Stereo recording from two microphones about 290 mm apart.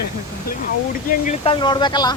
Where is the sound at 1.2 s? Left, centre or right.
Centre.